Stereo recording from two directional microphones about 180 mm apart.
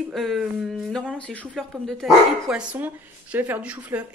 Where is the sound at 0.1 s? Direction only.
Centre (ahead or behind).